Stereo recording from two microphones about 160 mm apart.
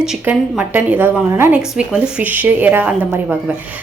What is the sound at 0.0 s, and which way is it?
A woman's voice, 5° right (ahead or behind).